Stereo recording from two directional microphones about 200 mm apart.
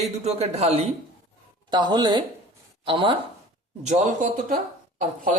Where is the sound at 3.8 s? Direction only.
35° right (ahead or behind).